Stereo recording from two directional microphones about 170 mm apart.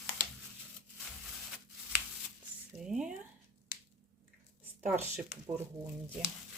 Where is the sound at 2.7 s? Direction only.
5° right (ahead or behind).